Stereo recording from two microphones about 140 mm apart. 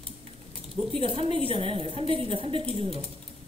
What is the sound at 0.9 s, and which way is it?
A woman's voice, 40° right (ahead or behind).